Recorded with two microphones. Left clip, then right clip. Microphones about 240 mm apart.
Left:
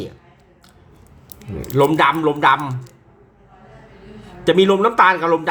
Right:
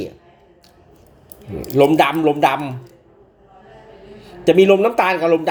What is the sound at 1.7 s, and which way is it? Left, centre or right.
Speech, centre.